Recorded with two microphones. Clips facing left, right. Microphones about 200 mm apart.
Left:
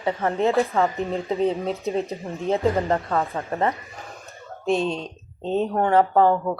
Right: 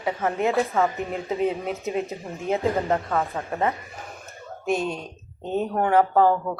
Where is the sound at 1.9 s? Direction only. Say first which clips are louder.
Left 1 dB; 35° left (ahead or behind).